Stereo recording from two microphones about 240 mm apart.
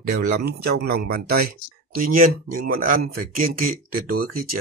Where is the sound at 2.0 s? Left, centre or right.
Right.